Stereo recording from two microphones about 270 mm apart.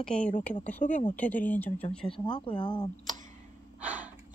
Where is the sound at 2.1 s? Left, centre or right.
Centre.